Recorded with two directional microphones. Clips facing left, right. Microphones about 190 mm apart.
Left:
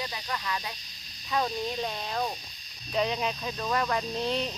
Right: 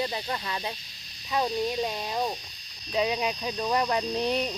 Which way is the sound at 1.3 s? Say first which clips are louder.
Right 3 dB; 15° right (ahead or behind).